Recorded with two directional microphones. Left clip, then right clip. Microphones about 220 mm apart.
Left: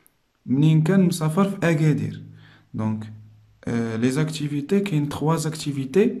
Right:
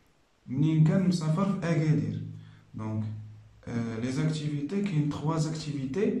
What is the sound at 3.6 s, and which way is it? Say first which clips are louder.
Speech: left 10 dB; 50° left (ahead or behind).